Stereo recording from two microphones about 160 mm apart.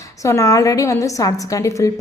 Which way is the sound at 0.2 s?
20° left (ahead or behind).